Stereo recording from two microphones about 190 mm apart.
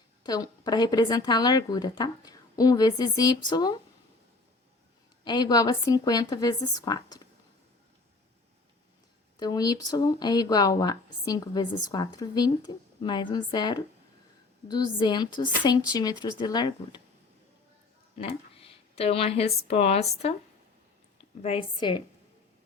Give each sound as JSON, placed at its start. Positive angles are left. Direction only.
{"t": 0.2, "sound": "a woman's voice", "side_deg": 20}
{"t": 5.2, "sound": "a woman's voice", "side_deg": 20}
{"t": 9.4, "sound": "a woman's voice", "side_deg": 20}
{"t": 18.2, "sound": "speech", "side_deg": 30}
{"t": 21.4, "sound": "a woman's voice", "side_deg": 30}